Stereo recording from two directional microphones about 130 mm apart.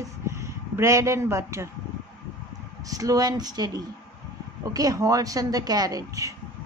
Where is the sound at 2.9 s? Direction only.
25° right (ahead or behind).